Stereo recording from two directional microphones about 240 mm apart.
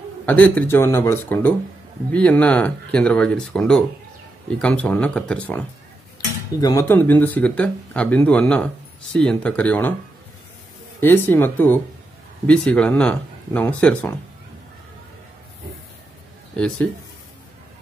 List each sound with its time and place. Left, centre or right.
0.2 s speech: centre
11.0 s speech: centre
16.5 s speech: centre